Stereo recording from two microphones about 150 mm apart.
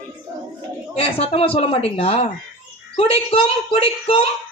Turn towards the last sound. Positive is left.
turn(degrees=40)  # may be behind; listen again after turning